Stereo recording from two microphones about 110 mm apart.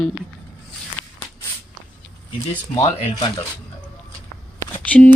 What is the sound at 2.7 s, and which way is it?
Speech, 45° left (ahead or behind).